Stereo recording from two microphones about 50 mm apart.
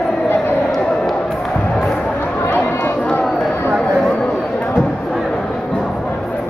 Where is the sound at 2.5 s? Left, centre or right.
Left.